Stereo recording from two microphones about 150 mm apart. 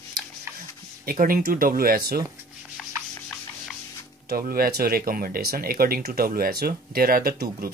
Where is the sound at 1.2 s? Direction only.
75° right (ahead or behind).